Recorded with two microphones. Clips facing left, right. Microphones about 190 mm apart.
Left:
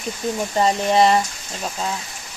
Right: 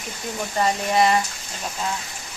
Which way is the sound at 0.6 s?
30° left (ahead or behind).